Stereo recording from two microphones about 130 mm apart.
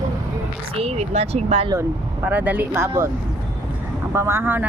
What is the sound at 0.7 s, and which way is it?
Speech, 55° right (ahead or behind).